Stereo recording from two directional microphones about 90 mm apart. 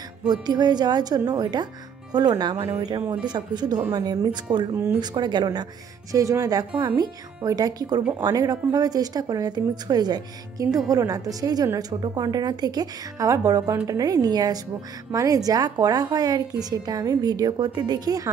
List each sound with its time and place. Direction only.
0.3 s a woman's voice: 50° right (ahead or behind)
6.1 s a woman's voice: 40° right (ahead or behind)